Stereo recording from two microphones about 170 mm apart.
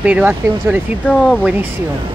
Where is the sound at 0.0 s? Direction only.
10° right (ahead or behind).